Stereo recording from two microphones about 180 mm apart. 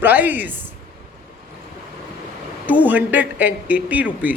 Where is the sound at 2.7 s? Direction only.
10° right (ahead or behind).